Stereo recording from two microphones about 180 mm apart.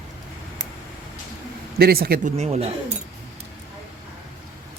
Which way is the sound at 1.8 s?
55° right (ahead or behind).